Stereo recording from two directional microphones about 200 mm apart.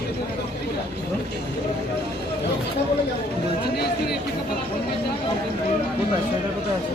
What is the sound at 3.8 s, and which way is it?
Speech, 55° left (ahead or behind).